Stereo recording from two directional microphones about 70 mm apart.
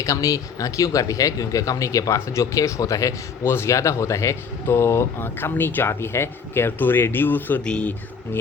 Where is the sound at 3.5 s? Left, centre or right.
Left.